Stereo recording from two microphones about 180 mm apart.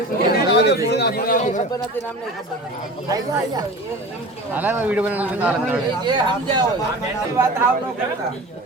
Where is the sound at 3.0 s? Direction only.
20° right (ahead or behind).